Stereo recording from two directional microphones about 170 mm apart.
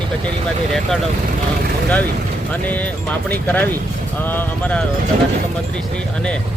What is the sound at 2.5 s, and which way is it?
Speech, 10° left (ahead or behind).